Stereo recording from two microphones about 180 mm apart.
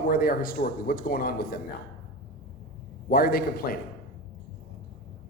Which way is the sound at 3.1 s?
55° left (ahead or behind).